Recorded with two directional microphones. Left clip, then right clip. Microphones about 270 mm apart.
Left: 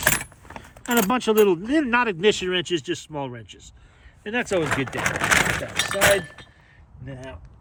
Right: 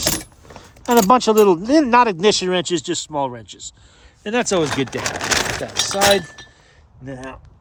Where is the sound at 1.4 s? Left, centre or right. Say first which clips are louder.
Right 6 dB; centre.